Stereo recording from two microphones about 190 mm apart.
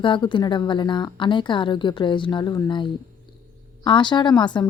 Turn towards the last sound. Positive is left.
turn(degrees=25)  # may be behind; listen again after turning